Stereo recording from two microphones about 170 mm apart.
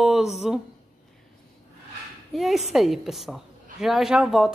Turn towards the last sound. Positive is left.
turn(degrees=-5)  # may be behind; listen again after turning